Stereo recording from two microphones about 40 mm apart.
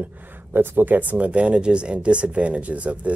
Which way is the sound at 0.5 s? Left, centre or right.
Right.